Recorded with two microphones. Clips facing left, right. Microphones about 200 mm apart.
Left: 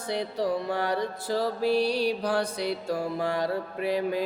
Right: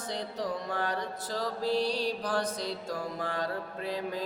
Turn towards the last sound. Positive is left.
turn(degrees=10)  # may be behind; listen again after turning